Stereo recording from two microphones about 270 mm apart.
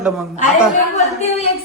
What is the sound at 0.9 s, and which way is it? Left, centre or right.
Speech, left.